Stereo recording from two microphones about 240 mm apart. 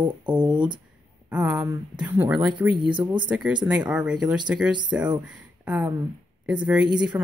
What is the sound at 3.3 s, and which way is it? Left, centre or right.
A woman's voice, centre.